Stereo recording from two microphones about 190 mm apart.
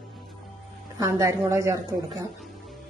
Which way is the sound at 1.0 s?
15° right (ahead or behind).